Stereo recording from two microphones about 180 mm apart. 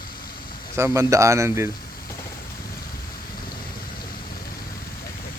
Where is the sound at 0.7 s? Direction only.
15° right (ahead or behind).